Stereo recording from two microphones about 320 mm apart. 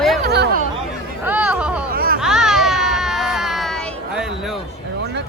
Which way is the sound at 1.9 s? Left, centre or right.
Right.